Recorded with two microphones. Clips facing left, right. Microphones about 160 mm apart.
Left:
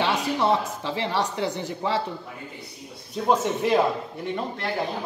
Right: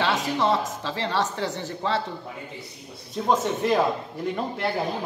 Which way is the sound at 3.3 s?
10° left (ahead or behind).